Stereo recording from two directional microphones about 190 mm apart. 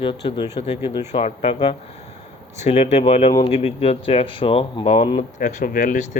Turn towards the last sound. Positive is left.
turn(degrees=45)  # may be behind; listen again after turning